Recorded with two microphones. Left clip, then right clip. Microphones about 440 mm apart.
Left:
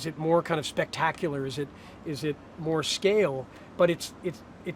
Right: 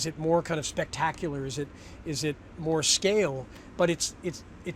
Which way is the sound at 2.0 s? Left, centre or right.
Right.